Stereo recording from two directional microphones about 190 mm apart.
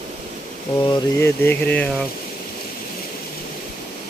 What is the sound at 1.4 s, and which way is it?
Speech, 10° left (ahead or behind).